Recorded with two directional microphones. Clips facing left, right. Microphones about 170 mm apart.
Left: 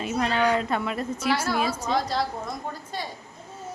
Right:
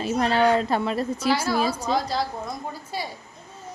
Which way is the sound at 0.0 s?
35° right (ahead or behind).